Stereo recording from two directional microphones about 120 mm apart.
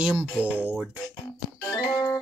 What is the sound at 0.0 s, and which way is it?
Music, 10° right (ahead or behind).